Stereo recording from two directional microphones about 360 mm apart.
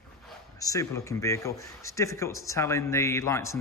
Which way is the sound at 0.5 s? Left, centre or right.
Centre.